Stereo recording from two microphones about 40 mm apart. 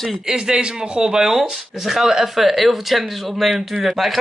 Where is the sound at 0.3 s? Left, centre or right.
Right.